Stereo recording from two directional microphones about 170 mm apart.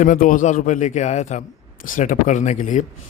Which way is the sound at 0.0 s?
50° left (ahead or behind).